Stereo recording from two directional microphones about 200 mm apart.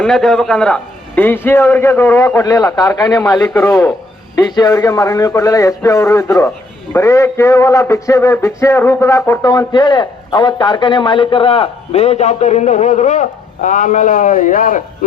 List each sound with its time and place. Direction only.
0.0 s a man's voice: centre (ahead or behind); by 14.8 s 45° left (ahead or behind)